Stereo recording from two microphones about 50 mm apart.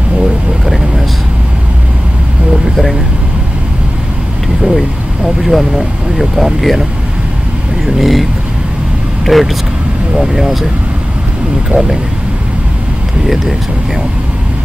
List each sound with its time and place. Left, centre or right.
0.2 s vehicle: centre
5.4 s speech: centre
11.7 s speech: right